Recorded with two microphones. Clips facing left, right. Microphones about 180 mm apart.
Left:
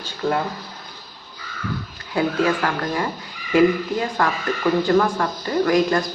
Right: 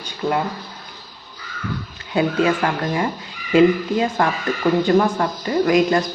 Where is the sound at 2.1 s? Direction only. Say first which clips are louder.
Right 2 dB; 20° right (ahead or behind).